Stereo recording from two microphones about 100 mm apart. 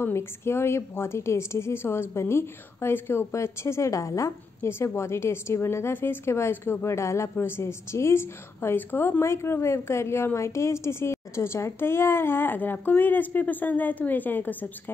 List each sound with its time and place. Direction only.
0.0 s a woman's voice: 25° left (ahead or behind)